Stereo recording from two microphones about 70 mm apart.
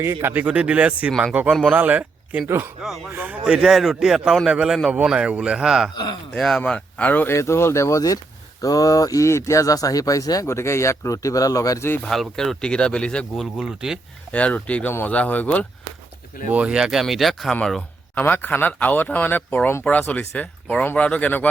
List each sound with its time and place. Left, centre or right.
0.0 s speech: right
0.4 s a man's voice: centre
3.4 s a man's voice: centre
6.3 s speech: centre
7.3 s speech: left
10.4 s speech: left
12.0 s speech: centre
12.6 s speech: centre
13.3 s speech: centre
14.3 s speech: centre
16.5 s speech: centre
18.1 s speech: left